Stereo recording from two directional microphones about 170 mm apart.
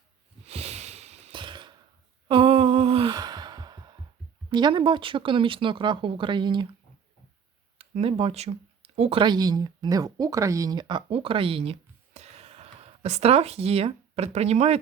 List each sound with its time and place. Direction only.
0.4 s wheeze: 40° right (ahead or behind)
2.2 s sigh: 30° right (ahead or behind)
4.4 s speech: 25° right (ahead or behind)
7.8 s speech: 35° right (ahead or behind)